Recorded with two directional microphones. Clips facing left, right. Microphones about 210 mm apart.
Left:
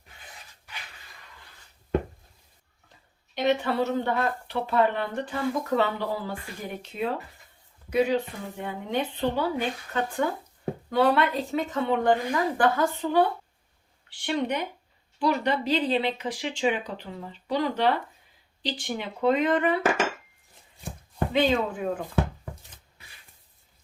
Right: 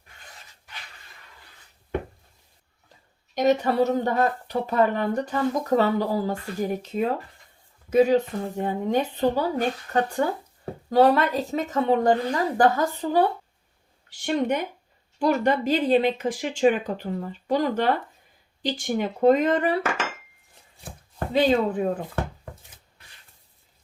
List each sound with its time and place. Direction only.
3.3 s speech: 40° right (ahead or behind)
21.3 s speech: 40° right (ahead or behind)